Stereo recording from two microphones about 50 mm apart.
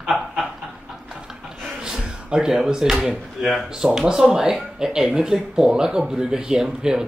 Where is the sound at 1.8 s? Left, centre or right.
Centre.